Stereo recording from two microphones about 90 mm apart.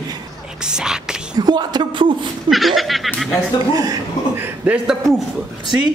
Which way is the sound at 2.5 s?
Centre (ahead or behind).